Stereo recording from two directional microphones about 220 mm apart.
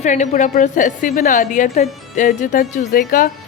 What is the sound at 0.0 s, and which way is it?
Speech, 35° left (ahead or behind).